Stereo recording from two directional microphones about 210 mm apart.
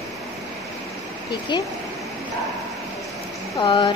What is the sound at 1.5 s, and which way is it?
Speech, 20° left (ahead or behind).